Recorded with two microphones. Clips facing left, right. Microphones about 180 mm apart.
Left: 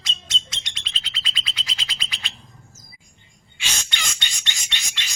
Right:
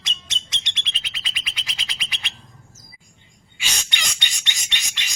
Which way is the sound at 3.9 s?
15° right (ahead or behind).